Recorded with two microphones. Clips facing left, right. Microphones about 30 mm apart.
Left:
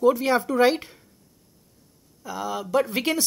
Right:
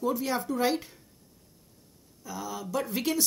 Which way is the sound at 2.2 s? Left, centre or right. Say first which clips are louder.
Left 7 dB; left.